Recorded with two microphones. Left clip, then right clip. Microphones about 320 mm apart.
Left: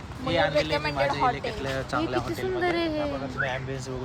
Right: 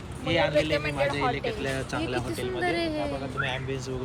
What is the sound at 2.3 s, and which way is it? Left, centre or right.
Speech, left.